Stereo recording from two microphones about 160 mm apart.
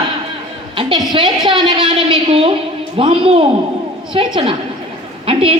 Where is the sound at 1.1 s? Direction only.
30° right (ahead or behind).